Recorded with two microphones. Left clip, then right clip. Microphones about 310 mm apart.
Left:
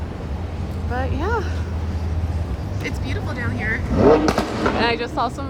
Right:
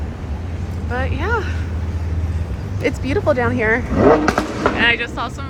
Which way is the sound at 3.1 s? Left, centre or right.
Centre.